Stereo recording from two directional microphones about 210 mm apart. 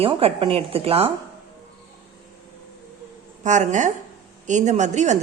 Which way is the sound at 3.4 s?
35° right (ahead or behind).